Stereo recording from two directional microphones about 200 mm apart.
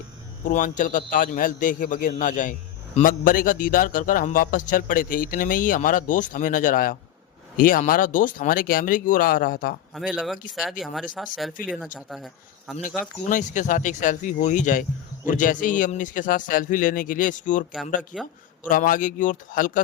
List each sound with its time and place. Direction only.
0.4 s a man's voice: 40° left (ahead or behind)
9.9 s speech: 5° right (ahead or behind)
13.0 s speech: 40° left (ahead or behind)
18.1 s a man's voice: centre (ahead or behind)
18.7 s speech: 40° left (ahead or behind)